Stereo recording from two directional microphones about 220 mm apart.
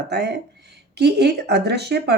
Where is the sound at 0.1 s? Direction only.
50° right (ahead or behind).